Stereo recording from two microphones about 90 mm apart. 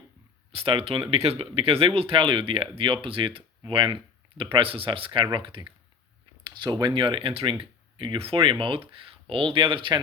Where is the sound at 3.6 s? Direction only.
60° right (ahead or behind).